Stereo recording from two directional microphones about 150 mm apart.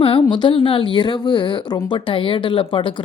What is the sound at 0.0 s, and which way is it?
Speech, 35° left (ahead or behind).